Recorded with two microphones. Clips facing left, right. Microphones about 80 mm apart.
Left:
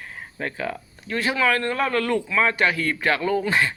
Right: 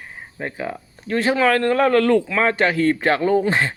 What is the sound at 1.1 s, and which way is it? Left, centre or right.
Speech, right.